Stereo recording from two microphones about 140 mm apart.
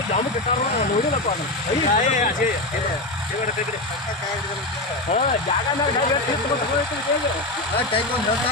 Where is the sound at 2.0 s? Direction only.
65° left (ahead or behind).